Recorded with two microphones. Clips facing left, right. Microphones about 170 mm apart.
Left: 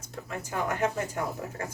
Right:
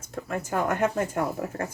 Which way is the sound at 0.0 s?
50° right (ahead or behind).